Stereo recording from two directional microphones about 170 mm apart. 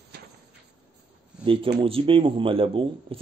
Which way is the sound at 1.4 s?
30° right (ahead or behind).